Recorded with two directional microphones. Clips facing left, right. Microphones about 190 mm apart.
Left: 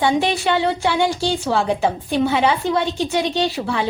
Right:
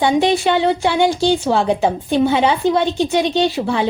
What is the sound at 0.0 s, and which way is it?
A woman's voice, 20° right (ahead or behind).